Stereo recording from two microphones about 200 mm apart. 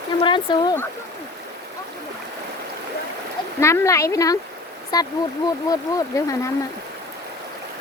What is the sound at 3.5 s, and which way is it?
Speech, 15° left (ahead or behind).